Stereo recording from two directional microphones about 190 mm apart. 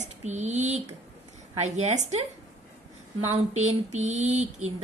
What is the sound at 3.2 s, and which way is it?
A woman's voice, 35° right (ahead or behind).